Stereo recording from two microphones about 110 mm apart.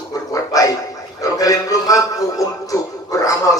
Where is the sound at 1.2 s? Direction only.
30° left (ahead or behind).